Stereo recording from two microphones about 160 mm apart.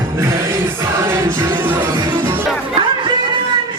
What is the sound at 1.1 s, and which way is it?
Music, 15° right (ahead or behind).